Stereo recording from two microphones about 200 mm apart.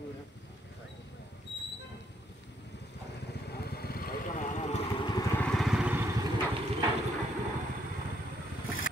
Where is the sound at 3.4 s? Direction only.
50° left (ahead or behind).